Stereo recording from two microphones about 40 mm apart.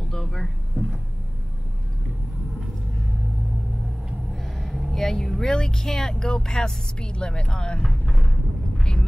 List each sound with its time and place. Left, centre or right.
0.1 s vehicle: centre
4.3 s vehicle: centre
5.4 s speech: centre
7.8 s speech: centre